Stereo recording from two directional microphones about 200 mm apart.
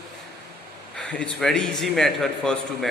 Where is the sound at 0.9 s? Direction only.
5° left (ahead or behind).